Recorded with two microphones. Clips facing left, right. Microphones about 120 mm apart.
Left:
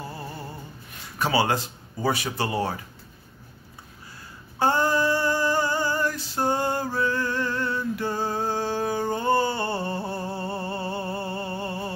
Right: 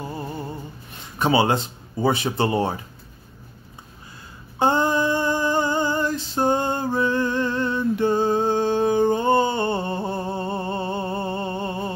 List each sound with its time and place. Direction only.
0.0 s music: 20° right (ahead or behind)
1.1 s speech: 20° right (ahead or behind)
4.6 s a sound: 20° right (ahead or behind)